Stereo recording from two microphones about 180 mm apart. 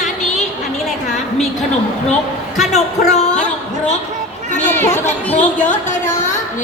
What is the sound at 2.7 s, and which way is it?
Speech, 40° left (ahead or behind).